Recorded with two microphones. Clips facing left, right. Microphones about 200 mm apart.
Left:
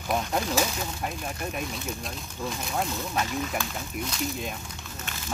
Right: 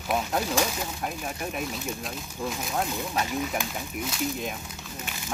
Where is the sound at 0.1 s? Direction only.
Centre (ahead or behind).